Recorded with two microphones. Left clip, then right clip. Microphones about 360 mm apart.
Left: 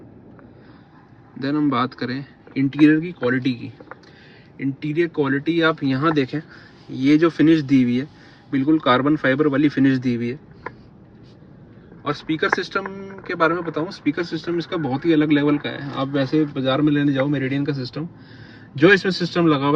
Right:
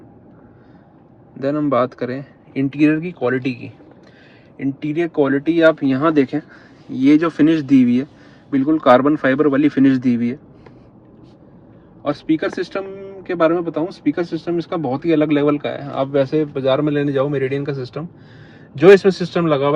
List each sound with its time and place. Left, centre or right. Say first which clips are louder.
1.4 s a man's voice: right 4 dB; centre
8.6 s speech: right 5 dB; right
9.0 s a man's voice: right 3 dB; centre
12.0 s speech: right 2 dB; centre